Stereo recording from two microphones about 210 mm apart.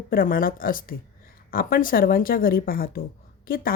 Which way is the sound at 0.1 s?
40° left (ahead or behind).